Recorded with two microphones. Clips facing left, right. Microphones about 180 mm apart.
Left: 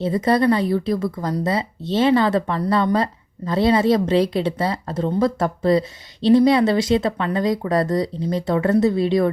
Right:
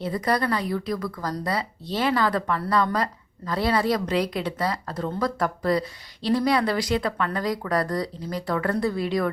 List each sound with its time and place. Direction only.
0.0 s a woman's voice: 25° left (ahead or behind)